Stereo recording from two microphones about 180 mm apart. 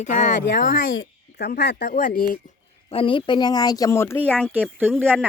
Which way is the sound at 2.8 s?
30° left (ahead or behind).